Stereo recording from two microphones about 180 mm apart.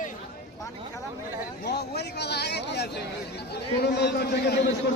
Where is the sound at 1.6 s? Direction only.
65° left (ahead or behind).